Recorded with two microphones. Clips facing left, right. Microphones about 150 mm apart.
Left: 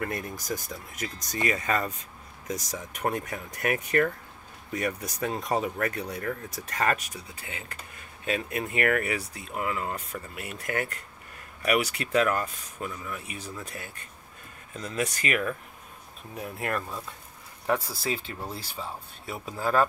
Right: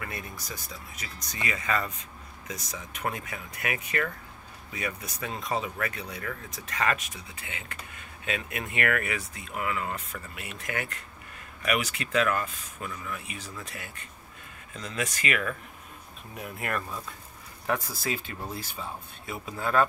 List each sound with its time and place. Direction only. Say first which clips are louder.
0.0 s speech: left 6 dB; 45° left (ahead or behind)
17.7 s speech: left 2 dB; 5° left (ahead or behind)
18.5 s speech: even; 30° left (ahead or behind)